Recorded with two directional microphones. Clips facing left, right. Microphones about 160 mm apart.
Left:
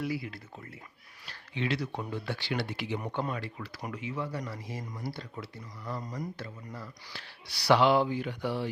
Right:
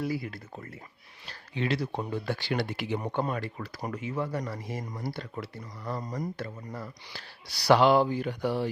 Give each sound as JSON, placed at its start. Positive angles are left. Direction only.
{"t": 0.0, "sound": "speech", "side_deg": -45}
{"t": 2.2, "sound": "speech", "side_deg": -45}
{"t": 6.0, "sound": "speech", "side_deg": -40}